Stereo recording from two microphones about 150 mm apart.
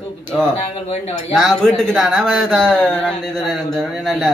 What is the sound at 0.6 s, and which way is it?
Speech, 45° left (ahead or behind).